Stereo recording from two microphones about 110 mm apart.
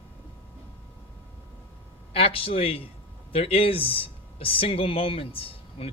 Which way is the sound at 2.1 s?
60° left (ahead or behind).